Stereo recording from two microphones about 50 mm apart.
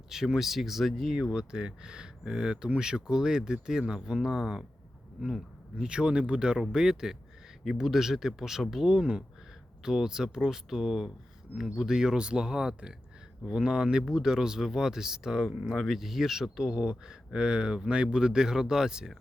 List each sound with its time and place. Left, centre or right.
0.1 s speech: centre
5.9 s speech: centre